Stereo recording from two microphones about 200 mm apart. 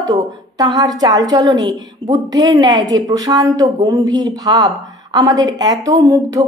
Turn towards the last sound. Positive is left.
turn(degrees=-15)  # may be behind; listen again after turning